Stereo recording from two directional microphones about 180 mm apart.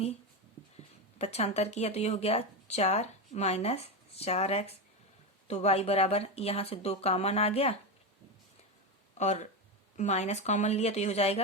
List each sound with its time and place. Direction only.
1.2 s speech: 35° left (ahead or behind)
9.1 s speech: 40° left (ahead or behind)